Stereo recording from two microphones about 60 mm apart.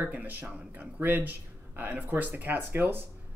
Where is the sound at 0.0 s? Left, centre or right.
Right.